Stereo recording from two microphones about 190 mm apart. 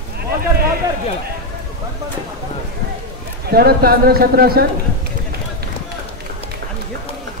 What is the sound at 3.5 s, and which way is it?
A man's voice, 55° right (ahead or behind).